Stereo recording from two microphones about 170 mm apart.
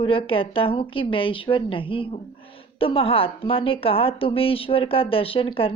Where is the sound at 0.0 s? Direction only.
30° left (ahead or behind).